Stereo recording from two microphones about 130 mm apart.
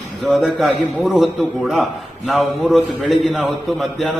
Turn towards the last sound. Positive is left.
turn(degrees=0)  # may be behind; listen again after turning